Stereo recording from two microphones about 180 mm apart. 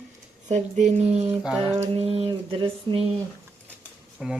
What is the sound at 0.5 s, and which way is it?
Mantra, 40° right (ahead or behind).